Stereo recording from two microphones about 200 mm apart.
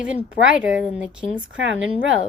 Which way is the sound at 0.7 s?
5° right (ahead or behind).